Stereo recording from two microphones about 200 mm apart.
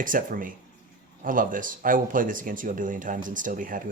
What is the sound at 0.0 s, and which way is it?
Speech, 45° right (ahead or behind).